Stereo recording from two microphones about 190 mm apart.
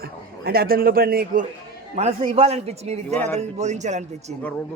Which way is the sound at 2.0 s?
35° right (ahead or behind).